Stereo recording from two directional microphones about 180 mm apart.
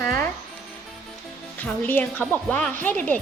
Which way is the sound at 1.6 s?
10° left (ahead or behind).